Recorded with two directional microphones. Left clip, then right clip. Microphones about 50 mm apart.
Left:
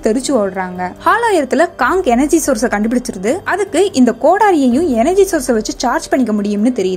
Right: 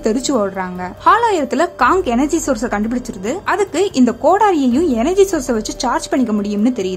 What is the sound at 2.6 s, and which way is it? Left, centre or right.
Speech, left.